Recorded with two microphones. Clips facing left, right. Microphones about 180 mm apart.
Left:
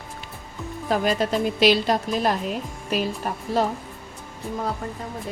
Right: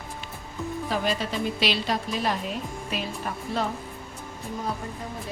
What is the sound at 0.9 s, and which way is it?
A woman's voice, 50° left (ahead or behind).